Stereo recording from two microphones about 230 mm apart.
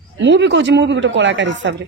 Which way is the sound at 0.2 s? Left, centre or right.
Right.